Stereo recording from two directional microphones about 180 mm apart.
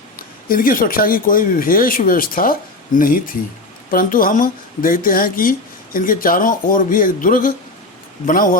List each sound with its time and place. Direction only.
0.2 s speech: 50° left (ahead or behind)